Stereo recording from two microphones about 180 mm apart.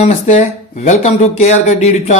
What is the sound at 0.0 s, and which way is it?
A man's voice, 40° left (ahead or behind).